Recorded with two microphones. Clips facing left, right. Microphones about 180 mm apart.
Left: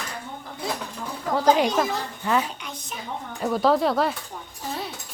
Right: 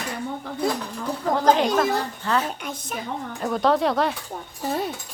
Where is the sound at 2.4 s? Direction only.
50° right (ahead or behind).